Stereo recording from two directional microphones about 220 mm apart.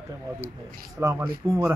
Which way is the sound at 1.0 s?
15° right (ahead or behind).